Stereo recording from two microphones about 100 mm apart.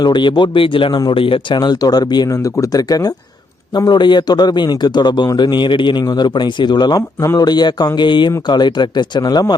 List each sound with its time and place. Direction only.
0.0 s a man's voice: 50° left (ahead or behind)